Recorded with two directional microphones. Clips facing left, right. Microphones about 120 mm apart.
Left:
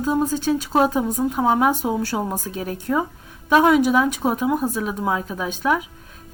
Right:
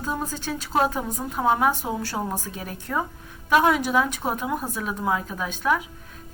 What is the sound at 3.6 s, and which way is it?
Speech, 15° left (ahead or behind).